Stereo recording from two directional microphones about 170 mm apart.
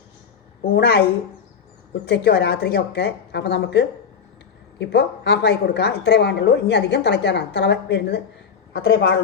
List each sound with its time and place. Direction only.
0.6 s a woman's voice: 60° left (ahead or behind)
2.0 s a woman's voice: 75° left (ahead or behind)